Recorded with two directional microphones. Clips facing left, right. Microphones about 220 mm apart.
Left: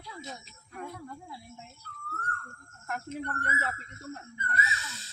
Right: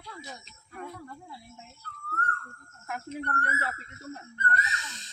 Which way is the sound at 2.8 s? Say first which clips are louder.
Even; centre (ahead or behind).